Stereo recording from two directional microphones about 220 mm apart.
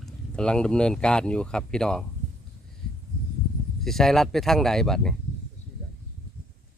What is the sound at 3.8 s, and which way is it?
Speech, centre (ahead or behind).